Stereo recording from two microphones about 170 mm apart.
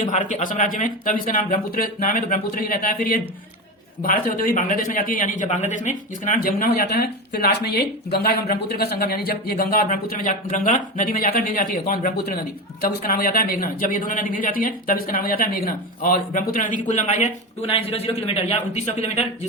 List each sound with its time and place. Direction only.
0.0 s a man's voice: 50° left (ahead or behind)